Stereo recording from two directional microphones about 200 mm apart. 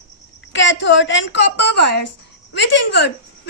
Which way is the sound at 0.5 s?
65° left (ahead or behind).